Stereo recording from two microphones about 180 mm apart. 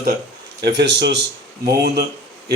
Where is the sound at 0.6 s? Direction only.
70° right (ahead or behind).